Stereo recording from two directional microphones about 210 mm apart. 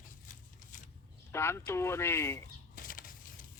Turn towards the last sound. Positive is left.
turn(degrees=40)  # may be behind; listen again after turning